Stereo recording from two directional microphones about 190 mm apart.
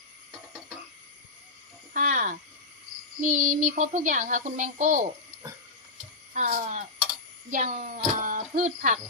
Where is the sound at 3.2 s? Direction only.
45° right (ahead or behind).